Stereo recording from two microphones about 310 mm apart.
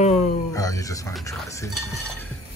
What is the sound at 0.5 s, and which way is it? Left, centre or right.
Speech, centre.